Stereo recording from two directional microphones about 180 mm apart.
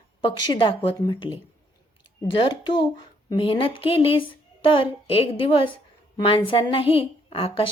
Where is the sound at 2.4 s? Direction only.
25° left (ahead or behind).